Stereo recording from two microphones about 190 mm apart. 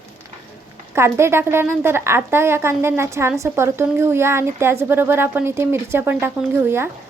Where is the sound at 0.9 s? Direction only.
15° right (ahead or behind).